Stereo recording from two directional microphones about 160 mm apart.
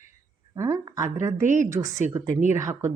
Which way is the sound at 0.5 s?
20° right (ahead or behind).